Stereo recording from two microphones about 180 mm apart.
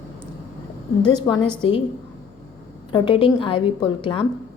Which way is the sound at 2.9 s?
30° left (ahead or behind).